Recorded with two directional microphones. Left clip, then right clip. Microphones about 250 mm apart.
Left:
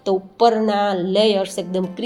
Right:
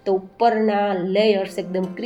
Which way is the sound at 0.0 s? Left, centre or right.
Left.